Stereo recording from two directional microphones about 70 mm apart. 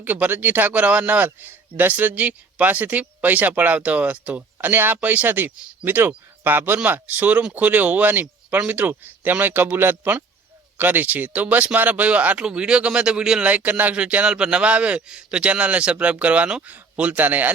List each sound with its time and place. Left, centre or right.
0.0 s speech: right
13.5 s speech: right